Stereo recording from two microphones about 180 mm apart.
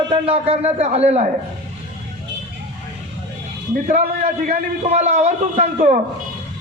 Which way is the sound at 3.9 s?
40° right (ahead or behind).